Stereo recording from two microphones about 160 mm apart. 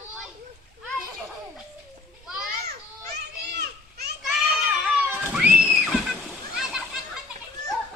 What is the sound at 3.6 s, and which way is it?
Children playing, 90° right.